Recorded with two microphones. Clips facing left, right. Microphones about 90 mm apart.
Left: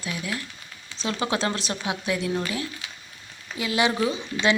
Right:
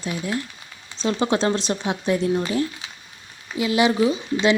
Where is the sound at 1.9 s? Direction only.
35° right (ahead or behind).